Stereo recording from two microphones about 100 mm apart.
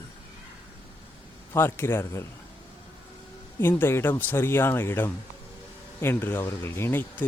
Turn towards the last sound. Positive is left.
turn(degrees=25)  # may be behind; listen again after turning